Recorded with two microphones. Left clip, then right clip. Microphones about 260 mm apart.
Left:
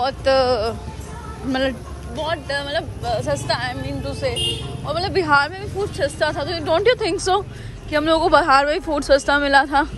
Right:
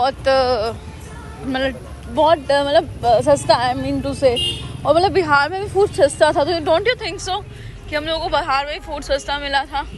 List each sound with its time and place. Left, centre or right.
0.0 s speech: centre
2.1 s speech: centre
5.2 s speech: centre
6.7 s a woman's voice: centre